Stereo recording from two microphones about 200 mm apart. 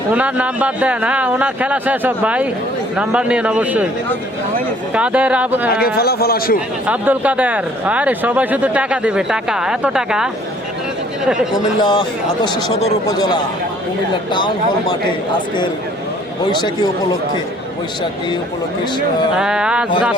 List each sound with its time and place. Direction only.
0.1 s a man's voice: 5° right (ahead or behind)
4.9 s speech: 5° right (ahead or behind)
5.7 s a man's voice: 50° left (ahead or behind)
6.8 s speech: 5° right (ahead or behind)
11.5 s speech: 20° left (ahead or behind)
13.1 s speech: 20° left (ahead or behind)
14.3 s speech: 20° left (ahead or behind)
16.5 s speech: 20° left (ahead or behind)
19.4 s a man's voice: 5° right (ahead or behind)